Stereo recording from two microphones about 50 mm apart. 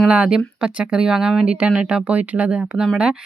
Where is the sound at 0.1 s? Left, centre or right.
Centre.